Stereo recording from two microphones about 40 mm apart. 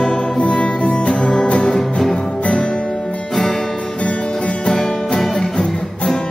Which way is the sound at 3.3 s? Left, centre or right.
Centre.